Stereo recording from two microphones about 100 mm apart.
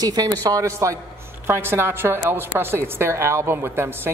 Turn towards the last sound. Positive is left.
turn(degrees=-25)  # may be behind; listen again after turning